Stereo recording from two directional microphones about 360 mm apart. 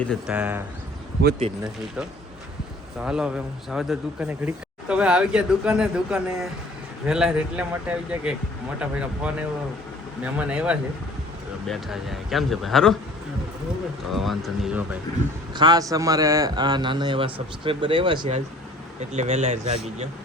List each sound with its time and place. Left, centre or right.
0.0 s speech: centre
1.2 s a man's voice: right
3.0 s speech: centre
10.3 s speech: centre
14.1 s speech: centre
15.5 s a man's voice: centre